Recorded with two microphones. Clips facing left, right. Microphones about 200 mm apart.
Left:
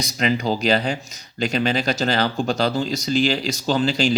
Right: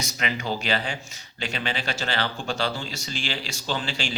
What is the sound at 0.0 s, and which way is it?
Speech, 35° left (ahead or behind).